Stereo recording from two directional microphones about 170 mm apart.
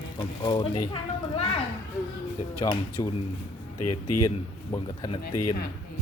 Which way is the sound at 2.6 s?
25° left (ahead or behind).